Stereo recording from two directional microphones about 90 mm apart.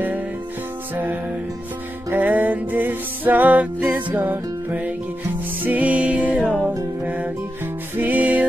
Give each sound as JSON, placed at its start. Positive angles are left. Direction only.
{"t": 2.1, "sound": "music", "side_deg": -15}
{"t": 8.0, "sound": "music", "side_deg": -15}